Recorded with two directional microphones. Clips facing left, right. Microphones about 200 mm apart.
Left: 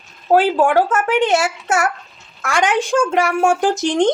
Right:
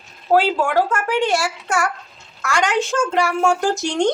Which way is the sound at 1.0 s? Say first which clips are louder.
Left 3 dB; 20° left (ahead or behind).